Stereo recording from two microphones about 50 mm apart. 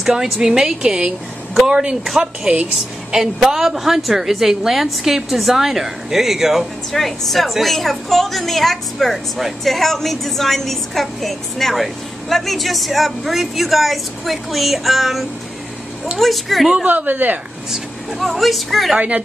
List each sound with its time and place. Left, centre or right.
0.0 s a woman's voice: centre
2.5 s a woman's voice: right
3.2 s a woman's voice: centre
16.8 s speech: right
18.2 s a woman's voice: centre
18.9 s a woman's voice: right